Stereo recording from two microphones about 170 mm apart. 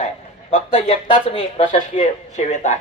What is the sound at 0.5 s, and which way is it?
A man's voice, 35° left (ahead or behind).